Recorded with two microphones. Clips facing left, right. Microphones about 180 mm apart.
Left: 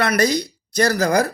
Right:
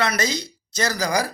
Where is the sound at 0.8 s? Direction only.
55° left (ahead or behind).